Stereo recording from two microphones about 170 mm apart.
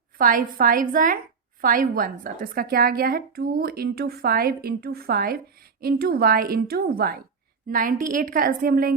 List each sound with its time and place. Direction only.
0.2 s a woman's voice: 55° right (ahead or behind)